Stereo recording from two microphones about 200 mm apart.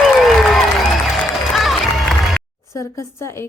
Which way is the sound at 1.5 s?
Centre (ahead or behind).